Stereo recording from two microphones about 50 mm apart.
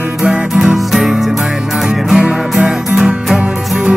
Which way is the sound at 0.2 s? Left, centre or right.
Centre.